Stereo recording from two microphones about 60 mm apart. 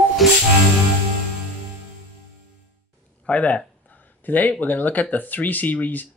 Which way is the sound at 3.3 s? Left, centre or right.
Left.